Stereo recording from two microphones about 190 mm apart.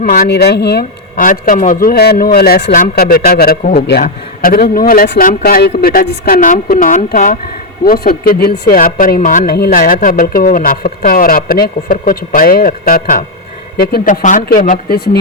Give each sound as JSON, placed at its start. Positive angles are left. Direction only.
{"t": 0.0, "sound": "speech", "side_deg": 50}